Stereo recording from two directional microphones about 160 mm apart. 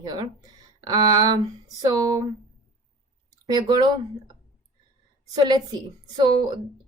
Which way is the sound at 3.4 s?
25° right (ahead or behind).